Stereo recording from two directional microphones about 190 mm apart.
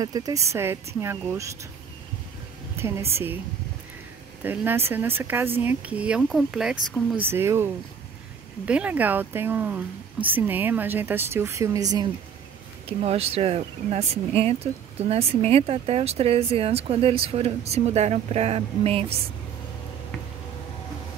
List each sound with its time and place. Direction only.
0.0 s speech: 20° right (ahead or behind)
2.7 s speech: 15° right (ahead or behind)
4.4 s speech: 10° right (ahead or behind)
12.8 s speech: 30° right (ahead or behind)